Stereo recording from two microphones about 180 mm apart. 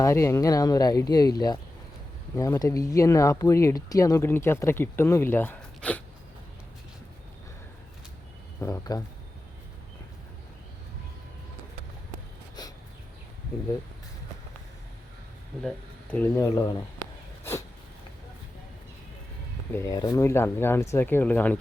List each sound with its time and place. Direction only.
0.0 s speech: 15° left (ahead or behind)
8.6 s speech: 20° left (ahead or behind)
12.6 s a sound: 20° left (ahead or behind)
16.1 s speech: 15° left (ahead or behind)
19.7 s speech: 20° left (ahead or behind)